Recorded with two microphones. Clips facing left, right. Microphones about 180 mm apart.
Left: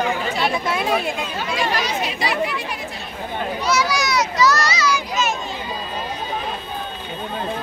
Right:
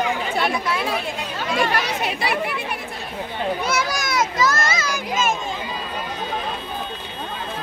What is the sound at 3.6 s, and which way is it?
Children playing, 50° right (ahead or behind).